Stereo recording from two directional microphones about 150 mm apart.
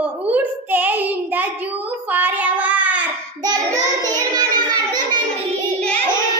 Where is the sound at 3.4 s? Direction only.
25° right (ahead or behind).